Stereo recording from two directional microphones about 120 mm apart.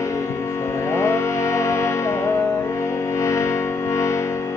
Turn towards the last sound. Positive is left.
turn(degrees=25)  # may be behind; listen again after turning